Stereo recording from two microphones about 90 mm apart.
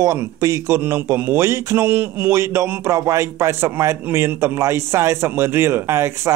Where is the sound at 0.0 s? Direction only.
35° right (ahead or behind).